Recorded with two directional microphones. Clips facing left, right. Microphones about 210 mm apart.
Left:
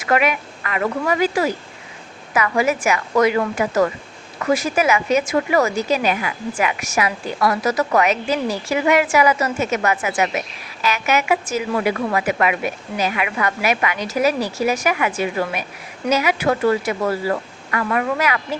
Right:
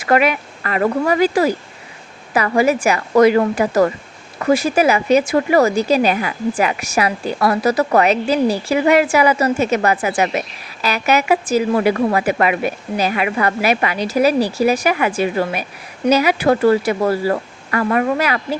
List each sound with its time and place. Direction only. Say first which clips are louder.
0.1 s a woman's voice: right 3 dB; 35° right (ahead or behind)